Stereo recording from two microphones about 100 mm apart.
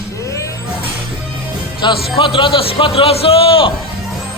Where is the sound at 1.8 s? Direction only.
60° left (ahead or behind).